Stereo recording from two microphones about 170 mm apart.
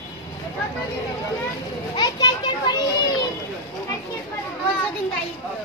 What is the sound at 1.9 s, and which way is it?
Children playing, 25° left (ahead or behind).